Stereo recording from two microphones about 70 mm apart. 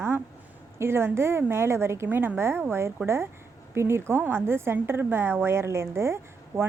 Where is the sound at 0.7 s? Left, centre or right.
Right.